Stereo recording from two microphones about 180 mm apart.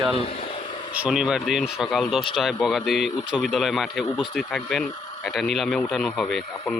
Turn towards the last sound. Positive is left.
turn(degrees=0)  # may be behind; listen again after turning